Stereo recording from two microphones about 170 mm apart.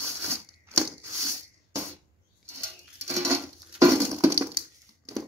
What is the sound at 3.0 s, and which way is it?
Music, 15° right (ahead or behind).